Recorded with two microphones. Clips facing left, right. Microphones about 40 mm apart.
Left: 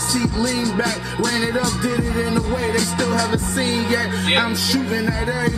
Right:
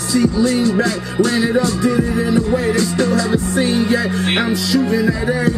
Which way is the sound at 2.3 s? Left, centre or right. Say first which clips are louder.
Right 5 dB; right.